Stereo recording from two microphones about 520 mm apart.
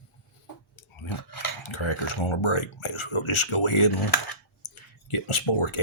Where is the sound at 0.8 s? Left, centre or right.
Left.